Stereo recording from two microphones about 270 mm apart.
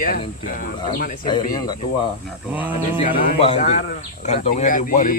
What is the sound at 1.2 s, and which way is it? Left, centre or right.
Speech, centre.